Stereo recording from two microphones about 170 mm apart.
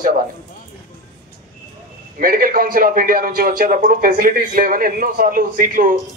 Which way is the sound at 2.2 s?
55° right (ahead or behind).